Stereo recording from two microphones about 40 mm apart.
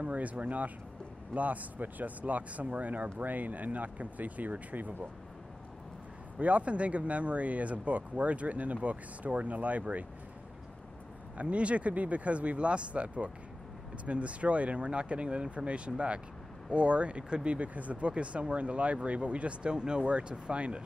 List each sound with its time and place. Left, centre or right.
0.0 s speech: right
6.4 s speech: right
11.3 s speech: right